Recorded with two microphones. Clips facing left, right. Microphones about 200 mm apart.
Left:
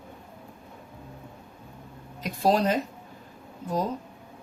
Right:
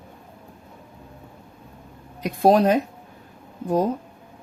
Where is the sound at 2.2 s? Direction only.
55° right (ahead or behind).